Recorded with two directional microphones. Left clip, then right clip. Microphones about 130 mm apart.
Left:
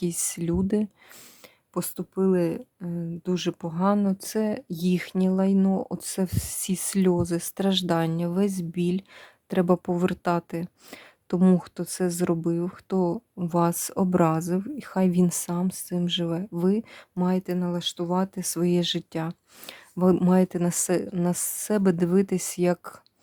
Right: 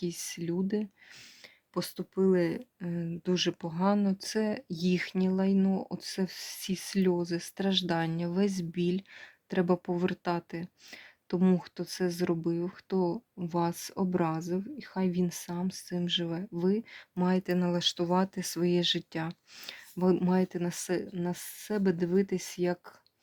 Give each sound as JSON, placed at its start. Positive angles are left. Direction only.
{"t": 0.0, "sound": "speech", "side_deg": 60}
{"t": 1.7, "sound": "speech", "side_deg": 45}
{"t": 2.8, "sound": "speech", "side_deg": 20}
{"t": 3.2, "sound": "speech", "side_deg": 35}
{"t": 17.2, "sound": "speech", "side_deg": 20}
{"t": 18.3, "sound": "speech", "side_deg": 35}